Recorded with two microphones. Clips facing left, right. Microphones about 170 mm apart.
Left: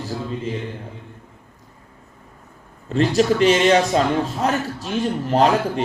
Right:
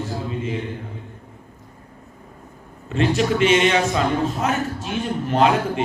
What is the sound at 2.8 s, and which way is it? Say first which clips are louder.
A man's voice: left 3 dB; 35° left (ahead or behind).